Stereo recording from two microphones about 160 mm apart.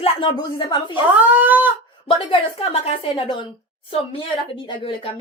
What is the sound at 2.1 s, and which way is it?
Speech, 35° left (ahead or behind).